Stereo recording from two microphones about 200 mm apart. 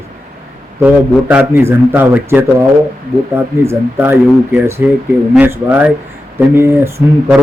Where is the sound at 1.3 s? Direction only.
10° right (ahead or behind).